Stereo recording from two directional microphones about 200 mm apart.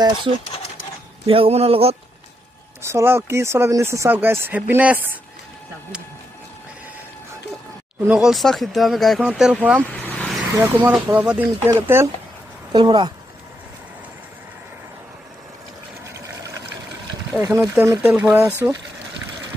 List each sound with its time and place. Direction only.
1.2 s speech: 30° right (ahead or behind)
2.8 s speech: 15° right (ahead or behind)
8.1 s speech: centre (ahead or behind)
9.8 s vehicle: 10° left (ahead or behind)
10.6 s speech: 10° right (ahead or behind)
17.3 s speech: 15° right (ahead or behind)